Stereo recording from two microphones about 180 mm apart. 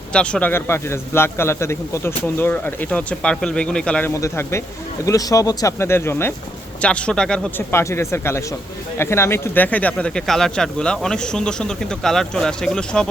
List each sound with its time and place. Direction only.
0.1 s a man's voice: 5° left (ahead or behind)
4.1 s a man's voice: 15° left (ahead or behind)